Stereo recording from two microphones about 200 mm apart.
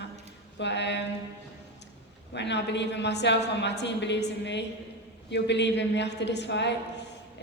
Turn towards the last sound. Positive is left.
turn(degrees=60)  # may be behind; listen again after turning